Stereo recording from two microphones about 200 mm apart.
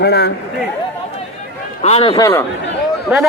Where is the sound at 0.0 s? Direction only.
55° left (ahead or behind).